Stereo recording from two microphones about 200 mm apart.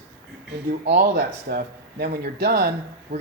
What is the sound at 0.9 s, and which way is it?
Speech, 60° right (ahead or behind).